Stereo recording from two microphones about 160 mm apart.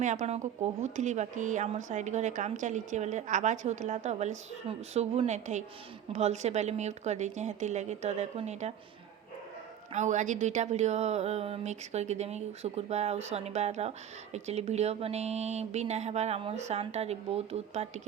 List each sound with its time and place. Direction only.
0.0 s speech: 50° right (ahead or behind)
9.9 s speech: 50° right (ahead or behind)